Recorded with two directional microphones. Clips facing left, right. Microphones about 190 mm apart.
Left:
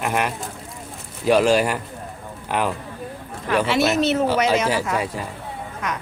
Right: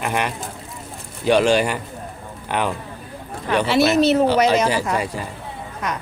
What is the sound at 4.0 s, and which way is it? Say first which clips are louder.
Speech: right 4 dB; 35° right (ahead or behind).